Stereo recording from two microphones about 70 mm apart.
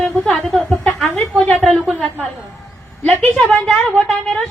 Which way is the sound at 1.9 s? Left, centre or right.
Centre.